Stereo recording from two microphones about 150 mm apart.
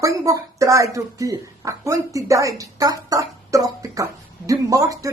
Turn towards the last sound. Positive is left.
turn(degrees=-25)  # may be behind; listen again after turning